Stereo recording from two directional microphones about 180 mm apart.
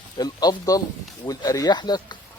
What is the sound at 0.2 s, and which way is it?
Speech, 20° left (ahead or behind).